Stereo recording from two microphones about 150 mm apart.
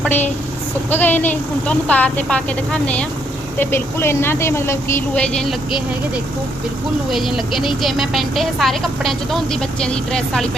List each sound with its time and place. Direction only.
0.0 s a woman's voice: 15° left (ahead or behind)
7.1 s speech: centre (ahead or behind)